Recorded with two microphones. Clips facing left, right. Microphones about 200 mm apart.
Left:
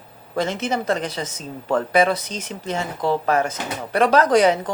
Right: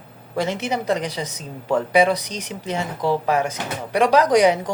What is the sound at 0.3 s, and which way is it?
Speech, 10° right (ahead or behind).